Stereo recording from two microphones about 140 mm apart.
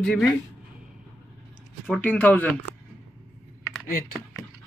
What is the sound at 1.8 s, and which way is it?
Speech, 10° left (ahead or behind).